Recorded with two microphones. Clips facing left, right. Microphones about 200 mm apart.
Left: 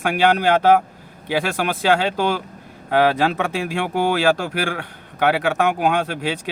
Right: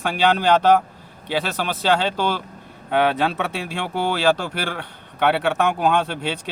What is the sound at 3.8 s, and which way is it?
Speech, 50° left (ahead or behind).